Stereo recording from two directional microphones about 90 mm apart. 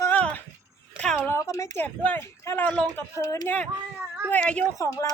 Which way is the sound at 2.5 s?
35° left (ahead or behind).